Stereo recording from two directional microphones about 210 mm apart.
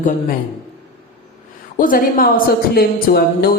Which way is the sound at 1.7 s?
40° left (ahead or behind).